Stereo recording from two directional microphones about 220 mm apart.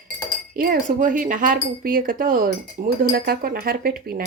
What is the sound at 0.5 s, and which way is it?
Speech, 40° right (ahead or behind).